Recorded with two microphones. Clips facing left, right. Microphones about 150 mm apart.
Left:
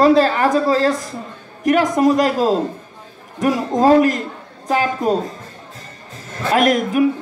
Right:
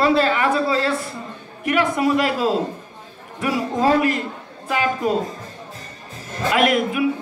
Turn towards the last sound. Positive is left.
turn(degrees=40)  # may be behind; listen again after turning